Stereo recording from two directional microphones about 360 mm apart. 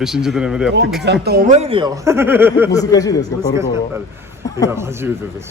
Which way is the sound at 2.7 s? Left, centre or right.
Centre.